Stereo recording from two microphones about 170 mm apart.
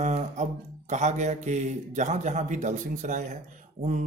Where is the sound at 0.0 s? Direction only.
45° right (ahead or behind).